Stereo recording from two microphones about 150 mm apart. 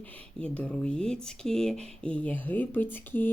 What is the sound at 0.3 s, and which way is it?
Speech, 10° left (ahead or behind).